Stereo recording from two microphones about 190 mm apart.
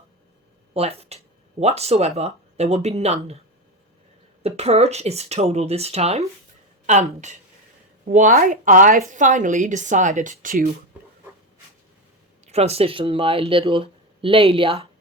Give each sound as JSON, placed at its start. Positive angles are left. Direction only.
{"t": 0.7, "sound": "speech", "side_deg": -30}
{"t": 4.4, "sound": "a woman's voice", "side_deg": -35}
{"t": 8.0, "sound": "a woman's voice", "side_deg": -45}
{"t": 12.5, "sound": "speech", "side_deg": -35}